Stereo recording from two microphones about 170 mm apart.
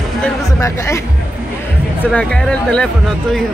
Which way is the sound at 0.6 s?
15° left (ahead or behind).